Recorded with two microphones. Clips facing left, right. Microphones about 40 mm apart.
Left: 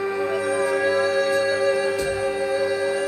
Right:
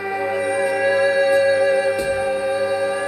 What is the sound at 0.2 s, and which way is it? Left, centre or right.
Music, centre.